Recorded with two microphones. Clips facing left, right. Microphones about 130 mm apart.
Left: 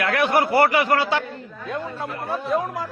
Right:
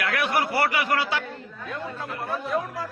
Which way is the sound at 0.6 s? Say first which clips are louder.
Left 6 dB; 25° left (ahead or behind).